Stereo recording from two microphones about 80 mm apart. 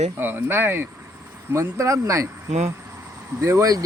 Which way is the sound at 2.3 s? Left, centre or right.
Right.